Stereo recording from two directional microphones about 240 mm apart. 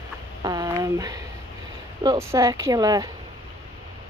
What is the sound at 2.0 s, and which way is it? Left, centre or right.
Speech, centre.